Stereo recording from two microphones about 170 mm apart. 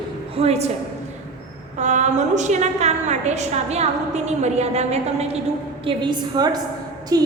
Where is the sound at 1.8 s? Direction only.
45° right (ahead or behind).